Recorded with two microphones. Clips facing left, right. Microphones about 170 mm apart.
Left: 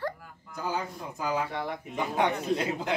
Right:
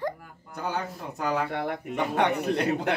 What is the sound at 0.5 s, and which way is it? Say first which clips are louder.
A man's voice: right 1 dB; 65° right (ahead or behind).